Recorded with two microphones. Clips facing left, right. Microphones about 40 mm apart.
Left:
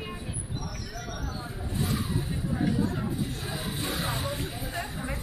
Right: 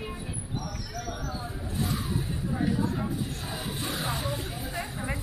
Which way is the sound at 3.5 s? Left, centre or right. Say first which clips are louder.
Left 1 dB; centre.